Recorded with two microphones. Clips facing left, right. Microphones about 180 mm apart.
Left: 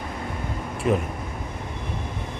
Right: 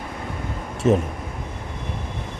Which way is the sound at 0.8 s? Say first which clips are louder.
Right 4 dB; 45° right (ahead or behind).